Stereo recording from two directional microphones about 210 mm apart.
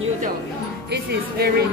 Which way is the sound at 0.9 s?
50° right (ahead or behind).